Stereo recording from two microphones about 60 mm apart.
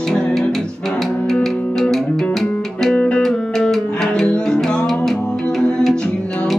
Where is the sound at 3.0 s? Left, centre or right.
Centre.